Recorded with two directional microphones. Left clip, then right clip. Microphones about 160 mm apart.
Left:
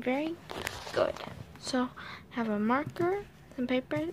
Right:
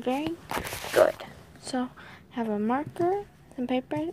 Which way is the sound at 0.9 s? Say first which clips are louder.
Right 9 dB; 30° right (ahead or behind).